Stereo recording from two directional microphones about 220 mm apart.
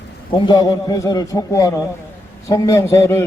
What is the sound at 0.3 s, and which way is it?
A man's voice, 20° left (ahead or behind).